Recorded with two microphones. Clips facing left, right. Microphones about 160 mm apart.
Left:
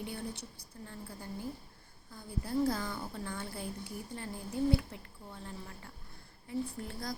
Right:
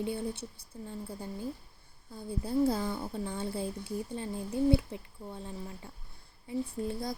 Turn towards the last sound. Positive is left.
turn(degrees=-25)  # may be behind; listen again after turning